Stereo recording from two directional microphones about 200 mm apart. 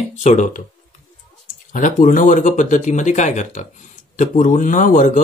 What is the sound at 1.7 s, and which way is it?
Speech, 40° left (ahead or behind).